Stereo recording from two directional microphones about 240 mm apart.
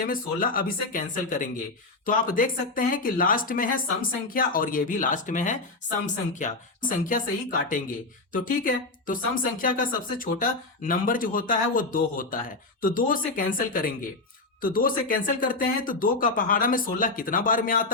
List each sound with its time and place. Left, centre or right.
0.0 s speech: left